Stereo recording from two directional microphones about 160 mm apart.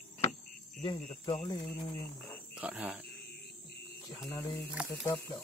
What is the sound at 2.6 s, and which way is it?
Speech, 5° right (ahead or behind).